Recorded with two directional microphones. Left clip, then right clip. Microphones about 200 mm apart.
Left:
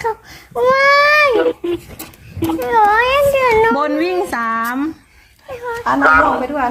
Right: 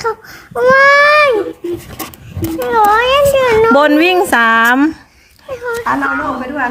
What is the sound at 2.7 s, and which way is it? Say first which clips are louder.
Speech: right 2 dB; 25° left (ahead or behind).